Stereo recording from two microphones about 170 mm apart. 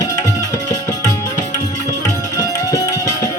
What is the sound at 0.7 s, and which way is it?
Music, 20° left (ahead or behind).